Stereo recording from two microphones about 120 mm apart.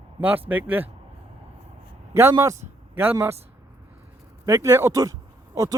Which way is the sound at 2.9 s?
15° right (ahead or behind).